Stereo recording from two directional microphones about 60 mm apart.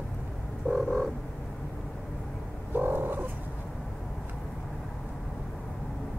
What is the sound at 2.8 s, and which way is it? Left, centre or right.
Frog, right.